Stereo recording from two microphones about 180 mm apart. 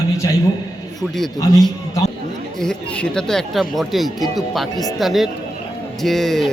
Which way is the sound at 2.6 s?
5° left (ahead or behind).